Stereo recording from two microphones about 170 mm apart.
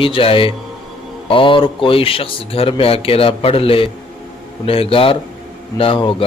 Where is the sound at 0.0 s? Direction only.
30° left (ahead or behind).